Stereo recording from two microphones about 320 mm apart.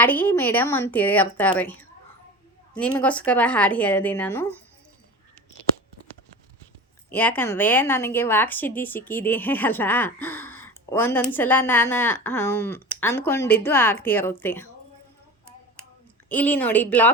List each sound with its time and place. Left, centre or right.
0.0 s a woman's voice: centre
7.1 s a woman's voice: centre
16.3 s a woman's voice: centre